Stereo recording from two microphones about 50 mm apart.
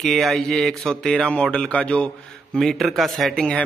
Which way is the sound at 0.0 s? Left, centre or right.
Centre.